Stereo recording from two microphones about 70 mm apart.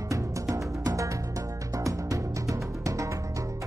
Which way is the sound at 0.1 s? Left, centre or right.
Right.